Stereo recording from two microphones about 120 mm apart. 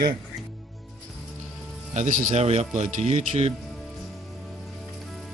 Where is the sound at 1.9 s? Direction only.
90° right; by 3.5 s 70° right (ahead or behind).